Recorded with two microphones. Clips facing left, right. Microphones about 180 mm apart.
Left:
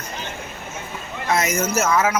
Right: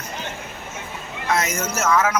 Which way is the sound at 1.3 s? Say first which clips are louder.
Left 4 dB; 10° left (ahead or behind).